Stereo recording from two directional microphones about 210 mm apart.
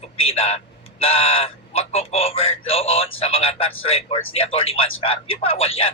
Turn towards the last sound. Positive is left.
turn(degrees=25)  # may be behind; listen again after turning